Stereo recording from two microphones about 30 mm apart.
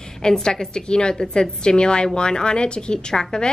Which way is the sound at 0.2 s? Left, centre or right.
Left.